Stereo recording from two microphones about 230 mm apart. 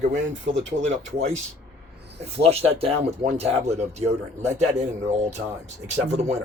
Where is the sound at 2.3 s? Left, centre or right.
Right.